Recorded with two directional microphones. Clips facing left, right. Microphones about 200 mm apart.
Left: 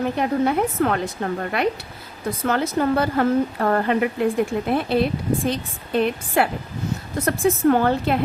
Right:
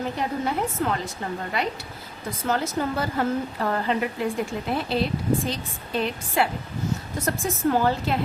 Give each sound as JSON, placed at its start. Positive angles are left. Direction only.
{"t": 0.2, "sound": "a woman's voice", "side_deg": 60}